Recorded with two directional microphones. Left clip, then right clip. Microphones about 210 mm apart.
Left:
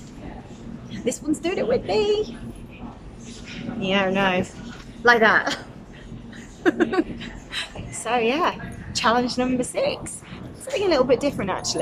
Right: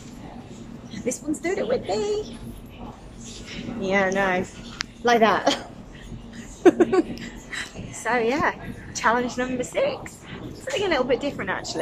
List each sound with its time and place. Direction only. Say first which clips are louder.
1.0 s a woman's voice: left 2 dB; 5° left (ahead or behind)
3.8 s a woman's voice: even; 5° left (ahead or behind)
5.0 s a woman's voice: left 2 dB; 10° right (ahead or behind)
6.6 s a sound: right 4 dB; 5° right (ahead or behind)
7.5 s a woman's voice: left 2 dB; 5° left (ahead or behind)